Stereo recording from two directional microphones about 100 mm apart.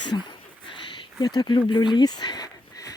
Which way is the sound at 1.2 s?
45° left (ahead or behind).